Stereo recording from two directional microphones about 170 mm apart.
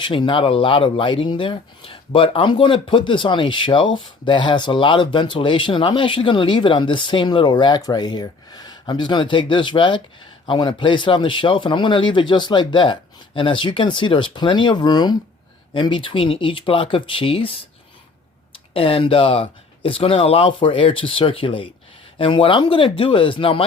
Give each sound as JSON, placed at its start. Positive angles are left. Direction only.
{"t": 0.0, "sound": "speech", "side_deg": 30}